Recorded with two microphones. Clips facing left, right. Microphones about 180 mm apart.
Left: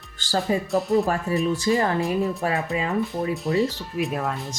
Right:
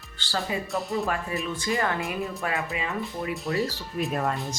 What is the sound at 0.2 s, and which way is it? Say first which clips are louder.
Speech: left 6 dB; 45° left (ahead or behind).